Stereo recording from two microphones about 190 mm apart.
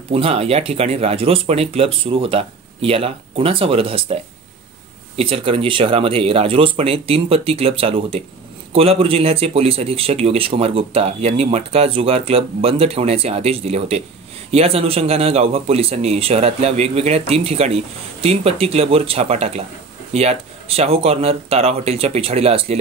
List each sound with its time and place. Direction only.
0.1 s speech: 30° right (ahead or behind)